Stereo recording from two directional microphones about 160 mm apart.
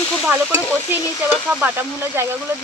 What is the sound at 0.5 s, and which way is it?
Stir, 10° left (ahead or behind).